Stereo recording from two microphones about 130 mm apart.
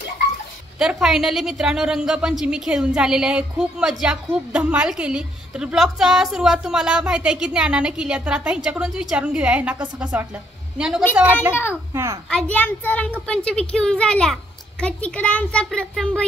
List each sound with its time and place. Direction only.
0.7 s a woman's voice: 5° right (ahead or behind)
11.7 s a child's voice: 20° right (ahead or behind)
12.3 s a child's voice: 10° left (ahead or behind)